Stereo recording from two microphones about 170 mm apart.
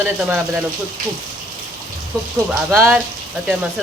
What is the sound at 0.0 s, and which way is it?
Speech, 10° right (ahead or behind).